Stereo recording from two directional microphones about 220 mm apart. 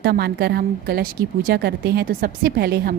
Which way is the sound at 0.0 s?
45° right (ahead or behind).